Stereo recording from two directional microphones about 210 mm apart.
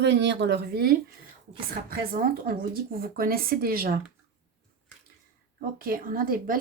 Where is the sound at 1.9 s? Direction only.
45° right (ahead or behind).